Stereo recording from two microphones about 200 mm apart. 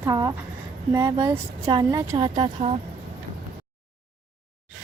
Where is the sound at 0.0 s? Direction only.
15° right (ahead or behind).